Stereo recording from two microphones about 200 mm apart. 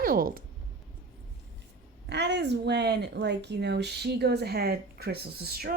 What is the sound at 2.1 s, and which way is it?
Speech, 60° right (ahead or behind).